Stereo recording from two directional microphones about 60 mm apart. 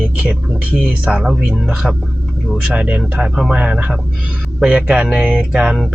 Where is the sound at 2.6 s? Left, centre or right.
Right.